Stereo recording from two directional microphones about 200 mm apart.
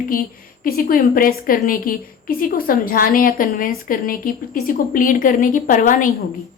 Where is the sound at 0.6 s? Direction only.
45° left (ahead or behind).